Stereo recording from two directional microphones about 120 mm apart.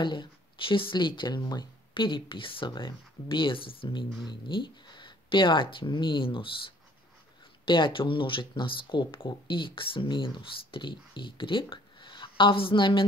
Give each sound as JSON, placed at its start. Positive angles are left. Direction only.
{"t": 0.0, "sound": "speech", "side_deg": 40}